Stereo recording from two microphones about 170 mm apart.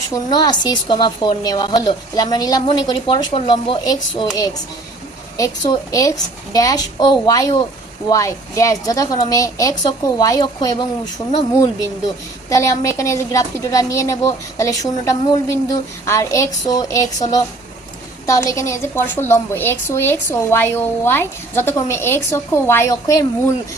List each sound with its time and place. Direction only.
0.1 s a woman's voice: 25° left (ahead or behind)
12.5 s a woman's voice: 20° left (ahead or behind)